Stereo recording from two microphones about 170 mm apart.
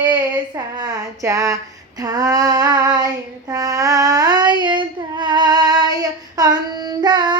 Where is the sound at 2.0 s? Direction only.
20° right (ahead or behind).